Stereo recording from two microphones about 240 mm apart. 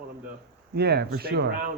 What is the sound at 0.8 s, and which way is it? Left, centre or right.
Speech, right.